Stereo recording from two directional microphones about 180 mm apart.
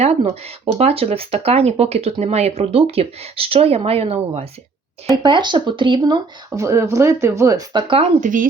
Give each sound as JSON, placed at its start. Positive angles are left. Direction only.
{"t": 0.0, "sound": "speech", "side_deg": -35}
{"t": 8.2, "sound": "speech", "side_deg": -45}